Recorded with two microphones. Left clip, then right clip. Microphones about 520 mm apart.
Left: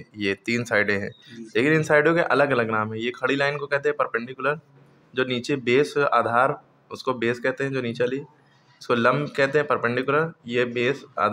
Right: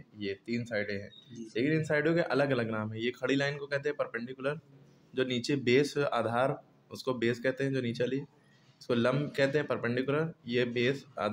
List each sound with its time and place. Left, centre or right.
0.2 s speech: right